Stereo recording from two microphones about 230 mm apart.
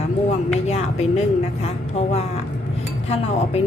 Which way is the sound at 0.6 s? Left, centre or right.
Left.